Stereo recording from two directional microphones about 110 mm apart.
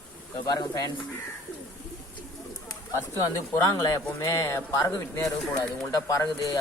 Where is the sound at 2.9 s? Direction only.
35° left (ahead or behind).